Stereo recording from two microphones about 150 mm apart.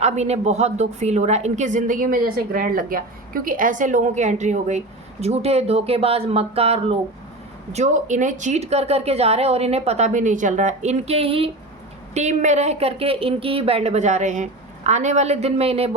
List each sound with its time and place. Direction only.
0.0 s a woman's voice: 50° right (ahead or behind)
7.7 s a woman's voice: 50° right (ahead or behind)
12.1 s a woman's voice: 50° right (ahead or behind)